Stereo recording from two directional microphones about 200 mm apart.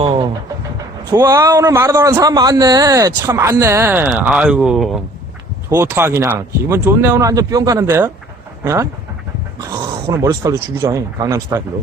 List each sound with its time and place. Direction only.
0.0 s vehicle: 30° right (ahead or behind)
1.1 s a man's voice: 15° right (ahead or behind)
5.6 s a man's voice: 10° right (ahead or behind)